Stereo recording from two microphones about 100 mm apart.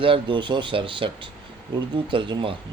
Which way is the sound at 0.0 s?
60° right (ahead or behind).